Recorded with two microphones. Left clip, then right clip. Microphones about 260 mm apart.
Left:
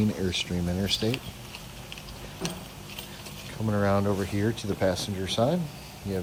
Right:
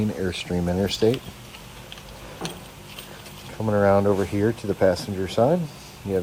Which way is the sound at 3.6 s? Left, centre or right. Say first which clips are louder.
Right 7 dB; right.